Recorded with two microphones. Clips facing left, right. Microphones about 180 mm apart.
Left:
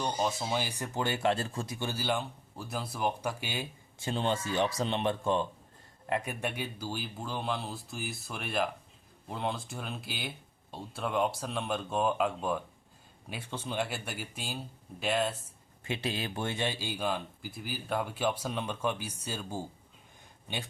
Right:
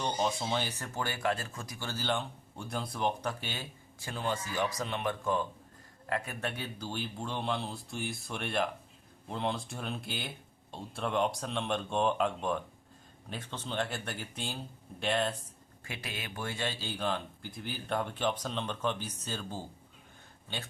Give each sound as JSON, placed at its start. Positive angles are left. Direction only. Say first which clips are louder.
{"t": 0.0, "sound": "speech", "louder": "even", "side_deg": 5}
{"t": 4.0, "sound": "speech", "louder": "left 4 dB", "side_deg": 25}
{"t": 15.8, "sound": "speech", "louder": "left 8 dB", "side_deg": 25}